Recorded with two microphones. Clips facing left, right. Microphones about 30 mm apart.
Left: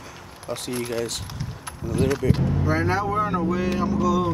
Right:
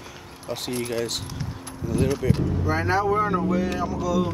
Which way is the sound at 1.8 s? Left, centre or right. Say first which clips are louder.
Right 1 dB; centre.